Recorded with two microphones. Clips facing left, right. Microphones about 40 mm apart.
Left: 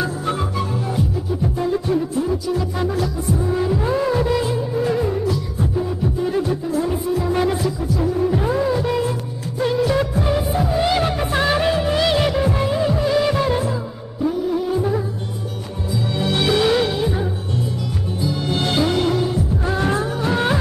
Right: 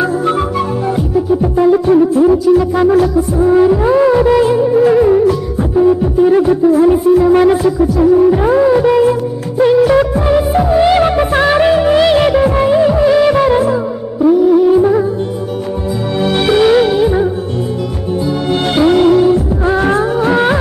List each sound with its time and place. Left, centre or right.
0.0 s music: right
16.2 s music: right